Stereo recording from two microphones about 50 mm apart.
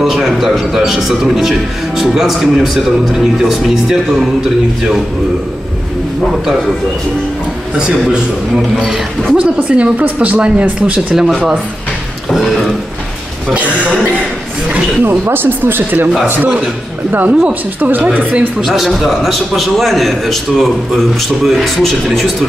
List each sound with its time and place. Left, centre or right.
0.0 s a man's voice: centre
7.7 s a man's voice: centre
11.1 s a man's voice: centre
13.5 s speech: right
15.0 s speech: right
17.3 s speech: right
17.7 s speech: right
18.6 s a man's voice: centre